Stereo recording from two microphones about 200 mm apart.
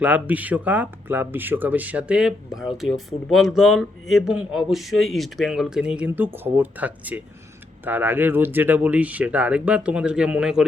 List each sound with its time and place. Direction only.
0.0 s speech: 10° right (ahead or behind)